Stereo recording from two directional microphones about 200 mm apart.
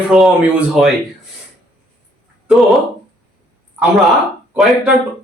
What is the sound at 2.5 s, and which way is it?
Speech, centre (ahead or behind).